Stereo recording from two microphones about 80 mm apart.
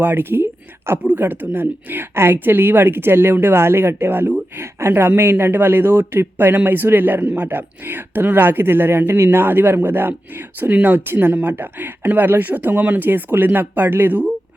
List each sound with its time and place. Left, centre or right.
0.0 s speech: right